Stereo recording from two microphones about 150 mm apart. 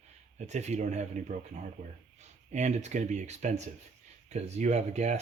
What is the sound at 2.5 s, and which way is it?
Speech, 50° right (ahead or behind).